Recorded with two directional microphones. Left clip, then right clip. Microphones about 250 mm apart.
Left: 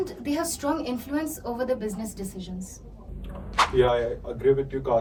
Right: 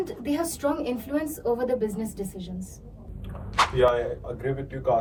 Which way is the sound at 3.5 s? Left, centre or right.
Centre.